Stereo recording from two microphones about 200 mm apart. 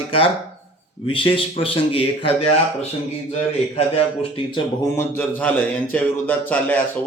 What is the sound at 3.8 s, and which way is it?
A man's voice, 25° left (ahead or behind).